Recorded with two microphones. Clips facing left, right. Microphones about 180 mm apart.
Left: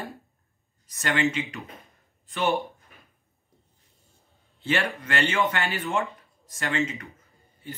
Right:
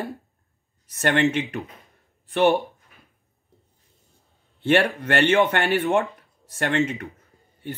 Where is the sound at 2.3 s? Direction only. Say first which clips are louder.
Right 7 dB; 65° right (ahead or behind).